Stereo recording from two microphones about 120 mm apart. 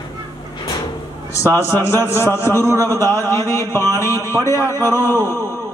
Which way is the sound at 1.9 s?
20° left (ahead or behind).